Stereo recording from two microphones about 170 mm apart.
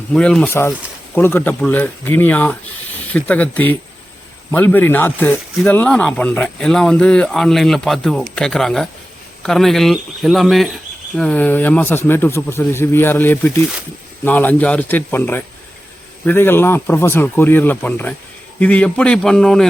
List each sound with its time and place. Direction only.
0.1 s speech: 5° left (ahead or behind)